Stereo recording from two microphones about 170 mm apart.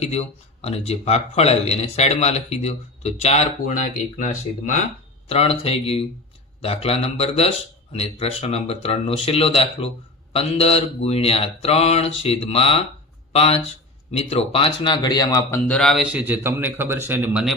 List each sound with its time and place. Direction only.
0.0 s speech: 40° left (ahead or behind)
5.3 s a man's voice: 35° left (ahead or behind); by 16.2 s centre (ahead or behind)
16.2 s a man's voice: 10° right (ahead or behind)